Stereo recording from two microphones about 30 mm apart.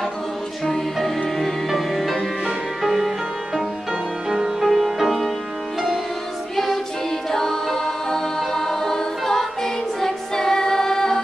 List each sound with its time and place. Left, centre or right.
0.9 s music: centre
4.3 s music: centre
4.6 s music: centre
6.5 s music: centre
7.2 s a capella: centre